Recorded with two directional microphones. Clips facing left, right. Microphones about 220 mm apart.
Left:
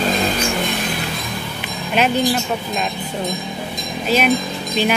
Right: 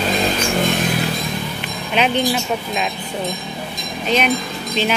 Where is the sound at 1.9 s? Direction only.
Centre (ahead or behind).